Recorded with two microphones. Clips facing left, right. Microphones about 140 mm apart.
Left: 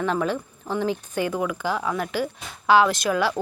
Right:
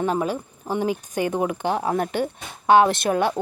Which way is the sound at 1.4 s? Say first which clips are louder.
Right 2 dB; 30° right (ahead or behind).